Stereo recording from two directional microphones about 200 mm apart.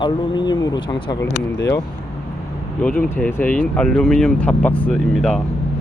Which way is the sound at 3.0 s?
10° left (ahead or behind).